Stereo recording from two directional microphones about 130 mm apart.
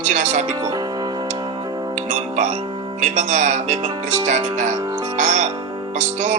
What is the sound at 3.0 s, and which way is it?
Speech, 60° right (ahead or behind).